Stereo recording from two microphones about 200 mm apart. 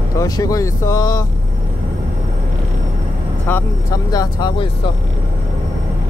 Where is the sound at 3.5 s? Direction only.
20° left (ahead or behind).